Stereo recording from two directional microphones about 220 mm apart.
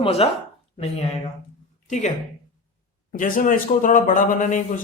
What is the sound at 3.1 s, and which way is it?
Speech, 35° left (ahead or behind).